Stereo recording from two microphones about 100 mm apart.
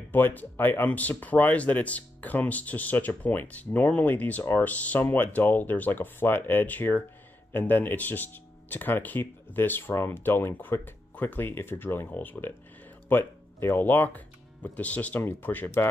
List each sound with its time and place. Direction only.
0.1 s speech: 20° left (ahead or behind)